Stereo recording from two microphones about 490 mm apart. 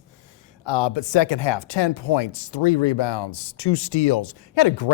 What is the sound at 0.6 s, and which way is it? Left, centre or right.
Speech, left.